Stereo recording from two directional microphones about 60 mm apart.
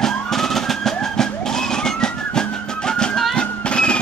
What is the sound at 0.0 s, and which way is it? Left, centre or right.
Emergency vehicle, centre.